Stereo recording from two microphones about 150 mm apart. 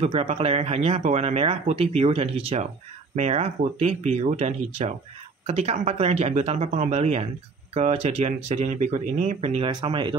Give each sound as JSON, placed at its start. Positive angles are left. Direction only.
{"t": 0.0, "sound": "speech", "side_deg": -40}
{"t": 9.7, "sound": "speech", "side_deg": -30}